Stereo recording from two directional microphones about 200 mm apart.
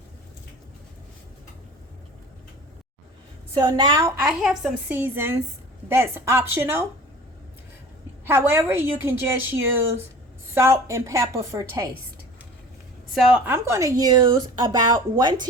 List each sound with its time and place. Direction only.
3.5 s a woman's voice: 20° right (ahead or behind)
4.2 s a woman's voice: 5° right (ahead or behind)
8.2 s a woman's voice: 10° right (ahead or behind)
13.1 s a woman's voice: 5° right (ahead or behind); by 14.8 s 20° right (ahead or behind)